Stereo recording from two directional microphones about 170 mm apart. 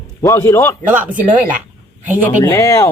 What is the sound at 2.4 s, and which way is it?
Speech, 15° left (ahead or behind).